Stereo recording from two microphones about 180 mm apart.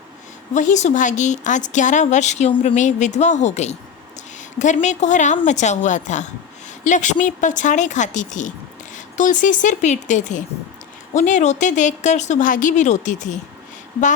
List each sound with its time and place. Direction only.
0.5 s a woman's voice: 45° left (ahead or behind)